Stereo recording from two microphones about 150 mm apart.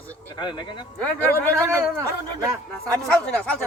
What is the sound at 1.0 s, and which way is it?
Speech, 10° left (ahead or behind).